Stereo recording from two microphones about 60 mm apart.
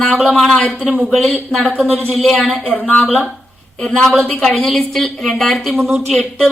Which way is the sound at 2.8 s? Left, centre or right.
Left.